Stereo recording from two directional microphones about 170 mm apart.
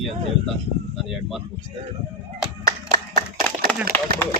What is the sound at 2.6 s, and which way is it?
Clapping, 55° right (ahead or behind).